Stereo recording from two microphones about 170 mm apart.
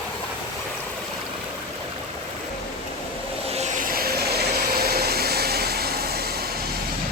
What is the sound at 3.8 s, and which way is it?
Vehicle, 60° right (ahead or behind).